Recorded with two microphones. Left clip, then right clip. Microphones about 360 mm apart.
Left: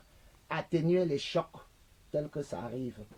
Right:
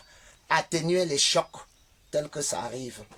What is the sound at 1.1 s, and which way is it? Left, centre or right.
Speech, right.